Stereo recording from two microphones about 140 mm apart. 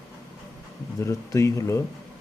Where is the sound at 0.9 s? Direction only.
20° left (ahead or behind).